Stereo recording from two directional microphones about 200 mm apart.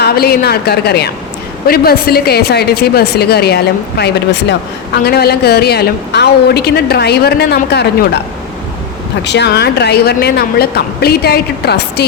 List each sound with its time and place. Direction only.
0.0 s a woman's voice: 50° left (ahead or behind)
9.2 s a woman's voice: 60° left (ahead or behind)